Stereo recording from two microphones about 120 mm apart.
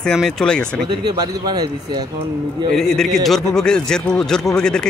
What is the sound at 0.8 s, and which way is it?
Speech, 35° right (ahead or behind).